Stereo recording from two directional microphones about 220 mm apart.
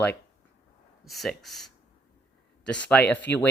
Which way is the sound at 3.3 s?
50° left (ahead or behind).